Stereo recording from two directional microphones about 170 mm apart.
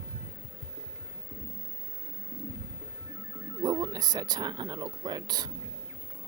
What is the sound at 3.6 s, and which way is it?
Speech, 25° right (ahead or behind).